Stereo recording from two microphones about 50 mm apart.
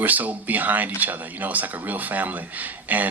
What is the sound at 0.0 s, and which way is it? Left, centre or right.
Speech, right.